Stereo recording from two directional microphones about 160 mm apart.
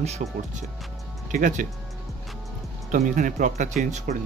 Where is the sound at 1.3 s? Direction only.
55° right (ahead or behind).